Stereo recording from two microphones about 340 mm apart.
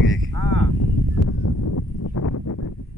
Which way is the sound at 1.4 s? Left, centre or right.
Left.